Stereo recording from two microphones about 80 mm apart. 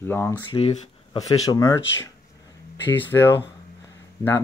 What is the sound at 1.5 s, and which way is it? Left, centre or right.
Speech, left.